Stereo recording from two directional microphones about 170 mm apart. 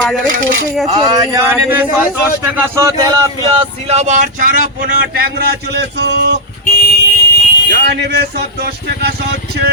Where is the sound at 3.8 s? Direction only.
40° right (ahead or behind); by 6.0 s 85° right.